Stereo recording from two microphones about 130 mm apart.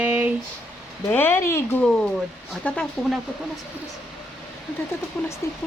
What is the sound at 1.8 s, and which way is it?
Speech, 5° left (ahead or behind).